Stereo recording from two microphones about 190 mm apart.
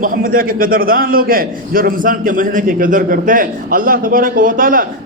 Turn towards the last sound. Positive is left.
turn(degrees=-45)  # may be behind; listen again after turning